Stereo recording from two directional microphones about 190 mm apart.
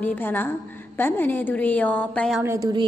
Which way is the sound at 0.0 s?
10° left (ahead or behind).